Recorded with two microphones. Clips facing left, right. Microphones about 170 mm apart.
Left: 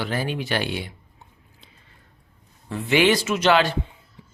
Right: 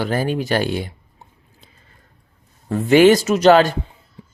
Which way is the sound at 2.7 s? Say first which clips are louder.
Right 8 dB; 45° right (ahead or behind).